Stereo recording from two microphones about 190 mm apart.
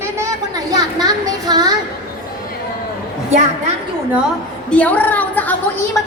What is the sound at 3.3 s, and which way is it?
Speech, 40° right (ahead or behind).